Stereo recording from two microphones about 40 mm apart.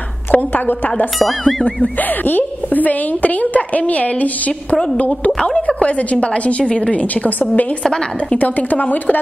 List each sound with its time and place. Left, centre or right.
0.3 s a sound: left
2.2 s a woman's voice: left
5.4 s a woman's voice: centre
5.9 s a woman's voice: left